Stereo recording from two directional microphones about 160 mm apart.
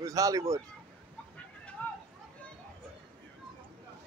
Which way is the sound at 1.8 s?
10° left (ahead or behind).